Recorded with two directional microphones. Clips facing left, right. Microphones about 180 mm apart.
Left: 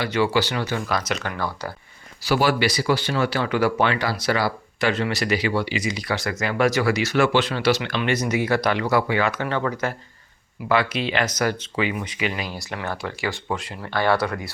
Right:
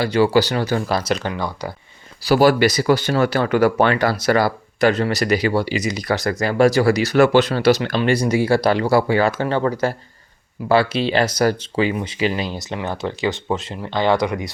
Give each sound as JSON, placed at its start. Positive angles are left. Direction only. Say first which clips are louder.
{"t": 0.0, "sound": "speech", "louder": "right 6 dB", "side_deg": -35}
{"t": 1.3, "sound": "speech", "louder": "right 3 dB", "side_deg": -15}
{"t": 2.2, "sound": "speech", "louder": "right 6 dB", "side_deg": -40}